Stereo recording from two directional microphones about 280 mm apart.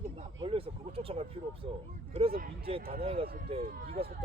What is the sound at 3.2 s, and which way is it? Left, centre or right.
Speech, right.